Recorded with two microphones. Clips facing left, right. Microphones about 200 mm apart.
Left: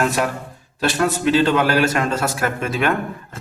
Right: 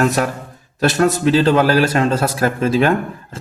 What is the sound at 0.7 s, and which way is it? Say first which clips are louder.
A man's voice: right 4 dB; 45° right (ahead or behind).